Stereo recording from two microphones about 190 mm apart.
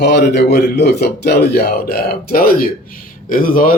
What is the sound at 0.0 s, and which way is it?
A man's voice, 60° left (ahead or behind).